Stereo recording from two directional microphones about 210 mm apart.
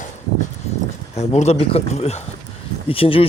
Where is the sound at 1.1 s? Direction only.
30° left (ahead or behind).